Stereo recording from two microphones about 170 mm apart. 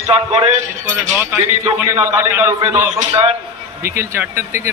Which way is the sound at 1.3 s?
15° right (ahead or behind).